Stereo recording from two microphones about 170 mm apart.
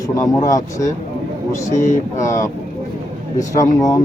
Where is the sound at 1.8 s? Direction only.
45° left (ahead or behind).